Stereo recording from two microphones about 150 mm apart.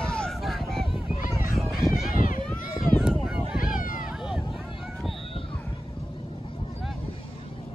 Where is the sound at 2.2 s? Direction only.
65° left (ahead or behind).